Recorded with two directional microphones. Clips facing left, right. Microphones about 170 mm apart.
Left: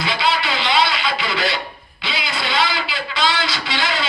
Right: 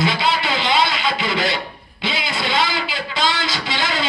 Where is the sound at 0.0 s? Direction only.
50° right (ahead or behind).